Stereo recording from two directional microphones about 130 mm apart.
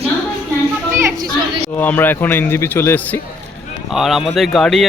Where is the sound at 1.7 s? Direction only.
15° left (ahead or behind).